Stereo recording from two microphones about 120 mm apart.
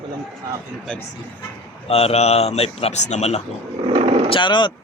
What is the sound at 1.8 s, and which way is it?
A man's voice, 55° left (ahead or behind).